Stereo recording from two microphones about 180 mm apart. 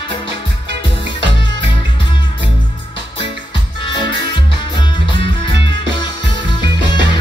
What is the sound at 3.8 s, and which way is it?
Music, 25° left (ahead or behind).